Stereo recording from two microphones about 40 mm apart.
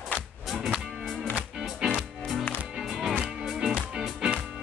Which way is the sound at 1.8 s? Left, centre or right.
Right.